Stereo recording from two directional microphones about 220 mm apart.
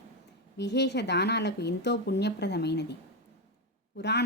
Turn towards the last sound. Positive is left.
turn(degrees=50)  # may be behind; listen again after turning